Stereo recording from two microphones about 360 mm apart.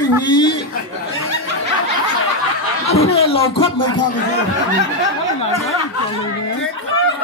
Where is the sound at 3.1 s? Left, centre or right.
Centre.